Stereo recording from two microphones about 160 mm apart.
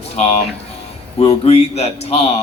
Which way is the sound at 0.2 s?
45° left (ahead or behind).